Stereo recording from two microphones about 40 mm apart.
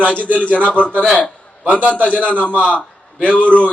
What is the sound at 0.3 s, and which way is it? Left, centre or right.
A man's voice, left.